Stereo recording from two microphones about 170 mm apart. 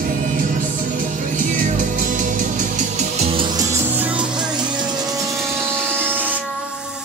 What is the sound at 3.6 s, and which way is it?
Music, 15° right (ahead or behind).